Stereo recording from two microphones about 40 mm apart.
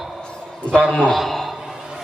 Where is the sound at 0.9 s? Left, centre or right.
Centre.